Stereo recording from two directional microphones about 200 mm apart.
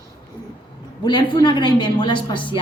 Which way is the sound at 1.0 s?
25° left (ahead or behind).